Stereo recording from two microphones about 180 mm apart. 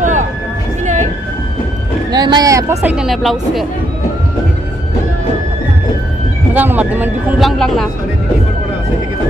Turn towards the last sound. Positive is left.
turn(degrees=-10)  # may be behind; listen again after turning